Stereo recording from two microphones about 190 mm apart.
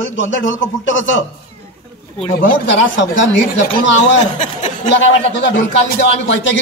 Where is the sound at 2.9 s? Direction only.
75° left (ahead or behind).